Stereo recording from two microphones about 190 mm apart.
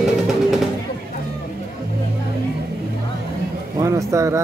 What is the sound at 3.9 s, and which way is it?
Vehicle, 15° right (ahead or behind).